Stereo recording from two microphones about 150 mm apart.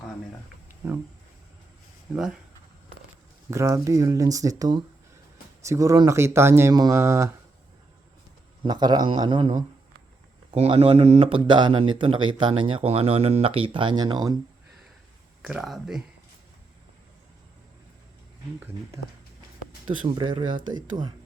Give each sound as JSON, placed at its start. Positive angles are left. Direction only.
{"t": 0.8, "sound": "speech", "side_deg": -15}
{"t": 2.1, "sound": "speech", "side_deg": -5}
{"t": 3.5, "sound": "speech", "side_deg": -20}
{"t": 8.6, "sound": "speech", "side_deg": -30}
{"t": 10.5, "sound": "speech", "side_deg": -40}
{"t": 15.4, "sound": "speech", "side_deg": -5}
{"t": 19.8, "sound": "speech", "side_deg": -30}